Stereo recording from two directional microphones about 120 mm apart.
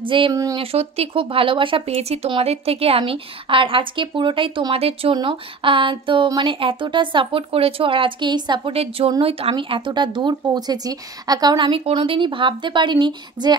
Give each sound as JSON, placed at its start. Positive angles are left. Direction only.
{"t": 0.0, "sound": "speech", "side_deg": -45}
{"t": 0.3, "sound": "speech", "side_deg": -30}
{"t": 0.6, "sound": "speech", "side_deg": -55}
{"t": 8.7, "sound": "speech", "side_deg": -55}